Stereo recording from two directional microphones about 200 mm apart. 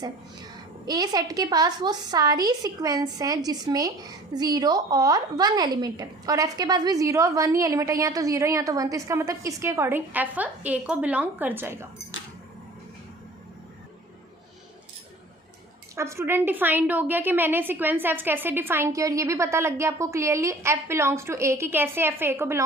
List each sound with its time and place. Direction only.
0.9 s a woman's voice: 20° right (ahead or behind)
16.0 s a woman's voice: 15° right (ahead or behind)